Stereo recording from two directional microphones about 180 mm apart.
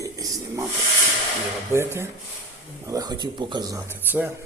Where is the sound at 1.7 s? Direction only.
15° right (ahead or behind).